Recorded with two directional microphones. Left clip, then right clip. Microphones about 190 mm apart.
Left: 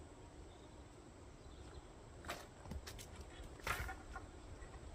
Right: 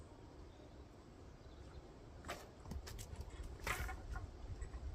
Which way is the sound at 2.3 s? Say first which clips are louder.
Left 1 dB; 5° left (ahead or behind).